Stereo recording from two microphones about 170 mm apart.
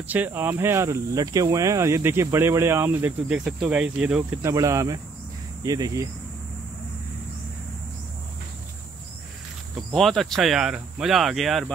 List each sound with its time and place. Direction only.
0.1 s speech: 10° right (ahead or behind)
9.9 s speech: centre (ahead or behind)